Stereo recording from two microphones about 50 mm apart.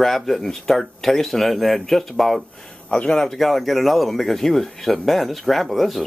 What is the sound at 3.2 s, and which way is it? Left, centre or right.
Speech, centre.